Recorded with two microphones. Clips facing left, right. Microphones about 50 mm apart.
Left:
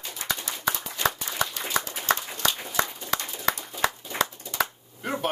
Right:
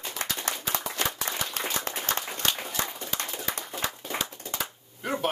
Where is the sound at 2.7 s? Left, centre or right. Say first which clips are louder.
Left 5 dB; left.